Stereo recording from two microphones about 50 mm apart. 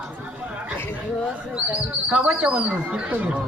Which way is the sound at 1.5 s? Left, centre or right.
Right.